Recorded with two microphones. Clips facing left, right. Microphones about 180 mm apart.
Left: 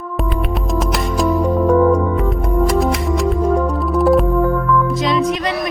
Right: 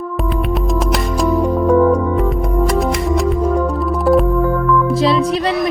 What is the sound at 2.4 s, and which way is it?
Music, centre (ahead or behind).